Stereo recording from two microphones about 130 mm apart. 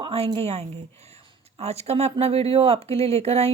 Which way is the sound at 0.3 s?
55° right (ahead or behind).